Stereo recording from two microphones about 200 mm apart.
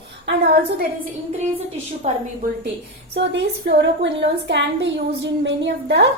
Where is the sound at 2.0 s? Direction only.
35° right (ahead or behind).